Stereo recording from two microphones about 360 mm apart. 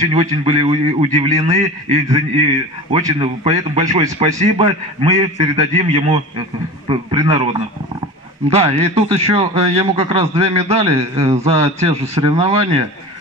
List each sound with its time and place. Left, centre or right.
0.0 s a man's voice: centre